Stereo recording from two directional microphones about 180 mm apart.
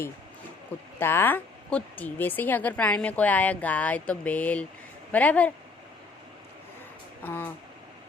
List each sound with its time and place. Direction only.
0.9 s speech: 10° left (ahead or behind)
7.3 s speech: 10° left (ahead or behind)